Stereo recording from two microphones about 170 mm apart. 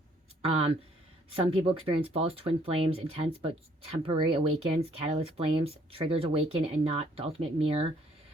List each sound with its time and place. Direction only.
0.4 s speech: 35° right (ahead or behind)